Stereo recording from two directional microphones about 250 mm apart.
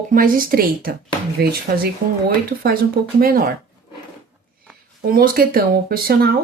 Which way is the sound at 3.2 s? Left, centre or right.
Right.